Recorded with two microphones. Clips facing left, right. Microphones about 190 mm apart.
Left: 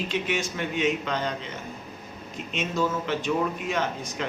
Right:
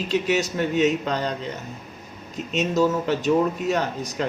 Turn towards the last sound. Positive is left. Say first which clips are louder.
# right 4 dB
turn(degrees=-40)  # may be behind; listen again after turning